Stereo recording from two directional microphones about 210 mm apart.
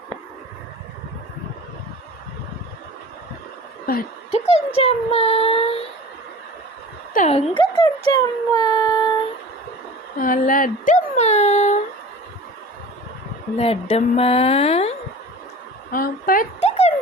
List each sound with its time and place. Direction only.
3.9 s speech: 45° left (ahead or behind)
4.5 s speech: 30° left (ahead or behind)
7.1 s speech: 40° left (ahead or behind)
7.8 s speech: 20° left (ahead or behind)
10.2 s speech: 40° left (ahead or behind)
13.6 s speech: 30° left (ahead or behind)
15.9 s speech: 45° left (ahead or behind)